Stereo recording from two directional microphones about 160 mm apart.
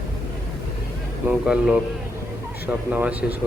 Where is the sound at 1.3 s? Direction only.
5° right (ahead or behind).